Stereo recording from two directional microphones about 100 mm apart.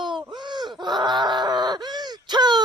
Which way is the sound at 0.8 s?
45° right (ahead or behind).